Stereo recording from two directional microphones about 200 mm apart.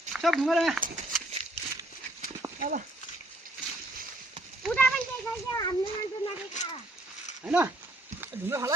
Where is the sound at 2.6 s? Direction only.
45° right (ahead or behind).